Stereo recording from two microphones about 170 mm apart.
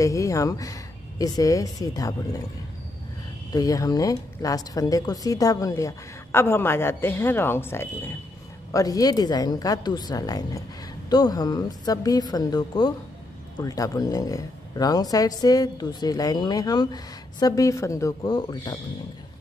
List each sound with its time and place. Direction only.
0.0 s speech: 20° left (ahead or behind)
3.5 s speech: 20° left (ahead or behind)